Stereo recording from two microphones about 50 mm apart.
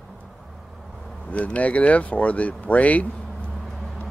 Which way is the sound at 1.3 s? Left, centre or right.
Left.